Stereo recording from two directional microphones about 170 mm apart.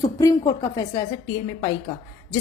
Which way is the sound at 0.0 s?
20° left (ahead or behind).